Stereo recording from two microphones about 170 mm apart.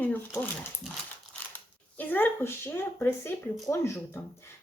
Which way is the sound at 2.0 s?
10° left (ahead or behind).